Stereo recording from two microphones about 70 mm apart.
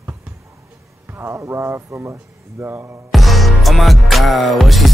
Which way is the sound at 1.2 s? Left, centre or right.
Right.